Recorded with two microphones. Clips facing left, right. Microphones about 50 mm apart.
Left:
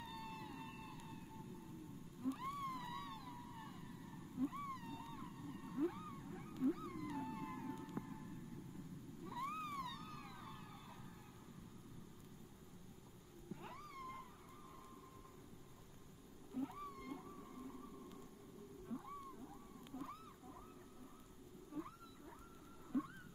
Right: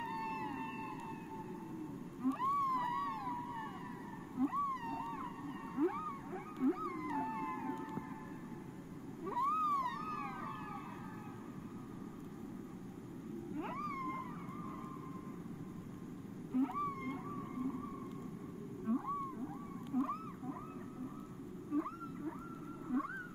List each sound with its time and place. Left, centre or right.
0.0 s whale vocalization: right
2.2 s whale vocalization: right
9.2 s a sound: right
9.8 s police car: right
13.6 s a sound: right
16.5 s whale vocalization: right
18.9 s whale vocalization: right
21.7 s whale vocalization: right
22.9 s wild animals: right